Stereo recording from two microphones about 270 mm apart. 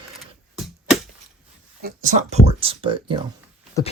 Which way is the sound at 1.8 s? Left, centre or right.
Right.